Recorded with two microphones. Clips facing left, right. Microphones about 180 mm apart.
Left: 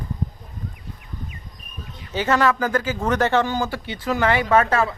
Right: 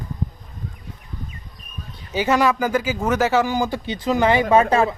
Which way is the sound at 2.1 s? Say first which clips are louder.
Right 1 dB; 10° right (ahead or behind).